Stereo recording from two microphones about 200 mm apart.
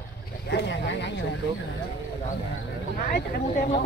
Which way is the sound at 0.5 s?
55° left (ahead or behind).